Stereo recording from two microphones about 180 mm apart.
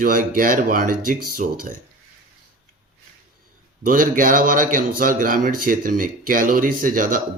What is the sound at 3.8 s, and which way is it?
Speech, 50° right (ahead or behind).